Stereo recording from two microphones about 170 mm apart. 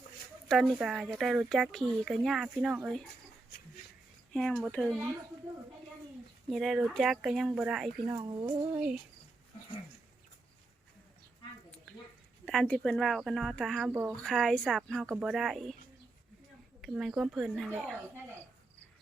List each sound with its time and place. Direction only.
0.4 s speech: centre (ahead or behind)
4.3 s speech: 5° left (ahead or behind)
6.5 s speech: centre (ahead or behind)
8.2 s speech: 30° right (ahead or behind)
8.4 s a sound: 10° right (ahead or behind)
12.5 s speech: 5° left (ahead or behind)
16.8 s speech: 5° right (ahead or behind)